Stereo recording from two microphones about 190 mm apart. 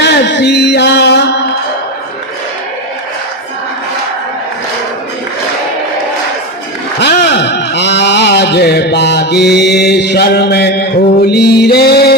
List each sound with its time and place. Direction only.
0.0 s music: 65° left (ahead or behind)
7.0 s a sound: 60° left (ahead or behind)
11.3 s music: 60° left (ahead or behind)